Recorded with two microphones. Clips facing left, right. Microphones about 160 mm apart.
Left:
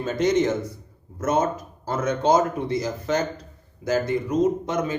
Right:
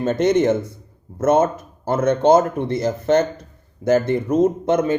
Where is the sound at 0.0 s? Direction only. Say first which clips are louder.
Right 4 dB; 55° right (ahead or behind).